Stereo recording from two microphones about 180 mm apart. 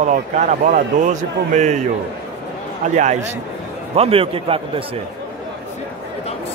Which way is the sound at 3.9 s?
30° right (ahead or behind).